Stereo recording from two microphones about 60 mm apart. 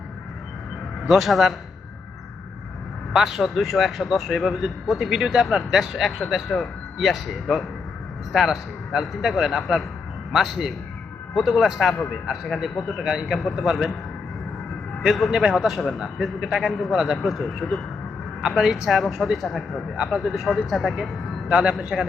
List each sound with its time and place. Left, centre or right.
1.0 s a man's voice: centre
3.1 s a man's voice: centre
15.0 s a man's voice: centre
21.5 s a man's voice: centre
21.8 s a man's voice: centre